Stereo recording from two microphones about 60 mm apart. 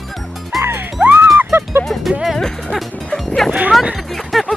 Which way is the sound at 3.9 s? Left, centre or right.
Centre.